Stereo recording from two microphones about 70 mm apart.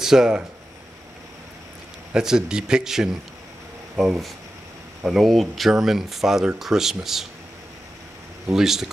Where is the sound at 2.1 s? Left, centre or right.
Centre.